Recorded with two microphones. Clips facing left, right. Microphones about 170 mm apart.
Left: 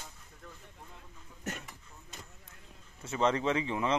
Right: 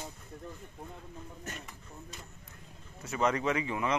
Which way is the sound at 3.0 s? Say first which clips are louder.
Left 1 dB; 25° left (ahead or behind).